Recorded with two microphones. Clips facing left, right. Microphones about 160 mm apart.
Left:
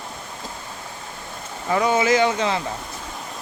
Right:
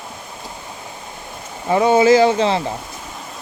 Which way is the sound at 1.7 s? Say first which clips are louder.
Right 6 dB; 30° right (ahead or behind).